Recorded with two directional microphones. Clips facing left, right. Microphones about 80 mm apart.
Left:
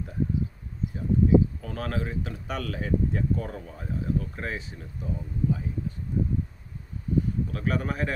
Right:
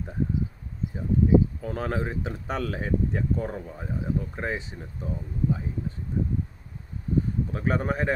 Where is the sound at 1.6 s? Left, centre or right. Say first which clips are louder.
Right 3 dB; right.